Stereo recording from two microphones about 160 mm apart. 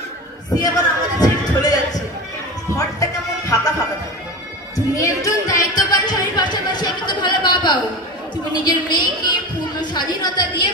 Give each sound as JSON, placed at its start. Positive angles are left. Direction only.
{"t": 0.6, "sound": "a sound", "side_deg": 25}
{"t": 3.0, "sound": "music", "side_deg": 20}
{"t": 4.7, "sound": "music", "side_deg": 20}
{"t": 8.5, "sound": "a woman's voice", "side_deg": 25}